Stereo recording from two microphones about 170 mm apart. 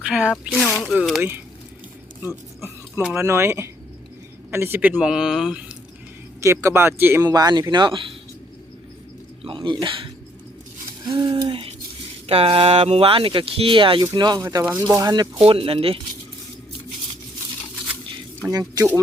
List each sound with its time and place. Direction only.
0.0 s speech: 5° right (ahead or behind)
2.6 s speech: 5° right (ahead or behind)
6.4 s speech: 15° right (ahead or behind)
7.3 s speech: 25° right (ahead or behind)
9.4 s speech: 30° right (ahead or behind)
15.4 s speech: 35° right (ahead or behind)
18.4 s speech: 20° right (ahead or behind)